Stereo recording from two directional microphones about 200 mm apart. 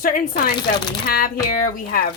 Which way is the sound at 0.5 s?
20° left (ahead or behind).